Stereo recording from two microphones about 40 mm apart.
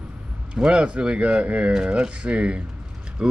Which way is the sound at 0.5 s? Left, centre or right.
Right.